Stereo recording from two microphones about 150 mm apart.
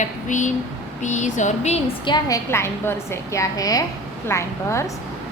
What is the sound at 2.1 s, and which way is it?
A woman's voice, 25° left (ahead or behind).